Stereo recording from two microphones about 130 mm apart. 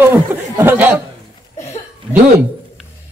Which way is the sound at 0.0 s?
20° right (ahead or behind).